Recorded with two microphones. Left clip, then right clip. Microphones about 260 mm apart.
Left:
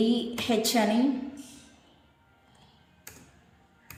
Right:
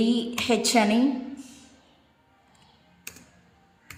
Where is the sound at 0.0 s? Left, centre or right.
Centre.